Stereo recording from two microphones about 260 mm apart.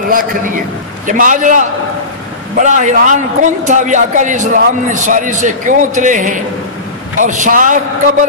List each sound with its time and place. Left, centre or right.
0.1 s a man's voice: right